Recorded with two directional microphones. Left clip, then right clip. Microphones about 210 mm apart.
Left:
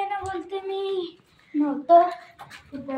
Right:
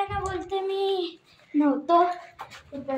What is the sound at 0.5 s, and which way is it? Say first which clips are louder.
Speech: right 4 dB; 30° right (ahead or behind).